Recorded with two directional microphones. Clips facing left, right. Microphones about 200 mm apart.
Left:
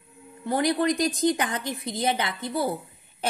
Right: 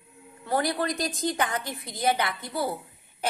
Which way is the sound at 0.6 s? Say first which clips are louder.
Left 6 dB; 20° left (ahead or behind).